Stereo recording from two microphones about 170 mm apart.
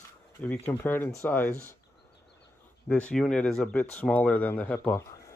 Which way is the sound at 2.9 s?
5° left (ahead or behind).